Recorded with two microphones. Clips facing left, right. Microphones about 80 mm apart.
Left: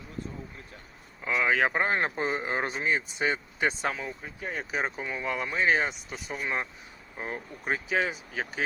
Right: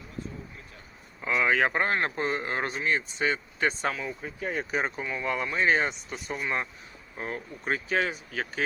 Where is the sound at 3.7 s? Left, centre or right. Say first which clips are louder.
Right 1 dB; centre.